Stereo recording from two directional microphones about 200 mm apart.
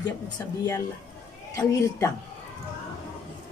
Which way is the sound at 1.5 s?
15° left (ahead or behind).